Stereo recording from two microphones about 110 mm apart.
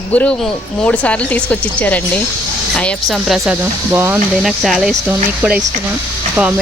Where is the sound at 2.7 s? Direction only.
10° left (ahead or behind).